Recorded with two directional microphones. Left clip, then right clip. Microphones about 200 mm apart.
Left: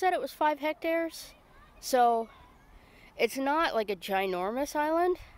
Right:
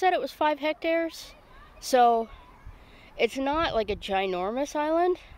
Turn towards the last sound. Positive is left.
turn(degrees=0)  # may be behind; listen again after turning